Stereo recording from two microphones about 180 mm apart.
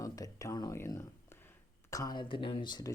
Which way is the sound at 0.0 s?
20° left (ahead or behind).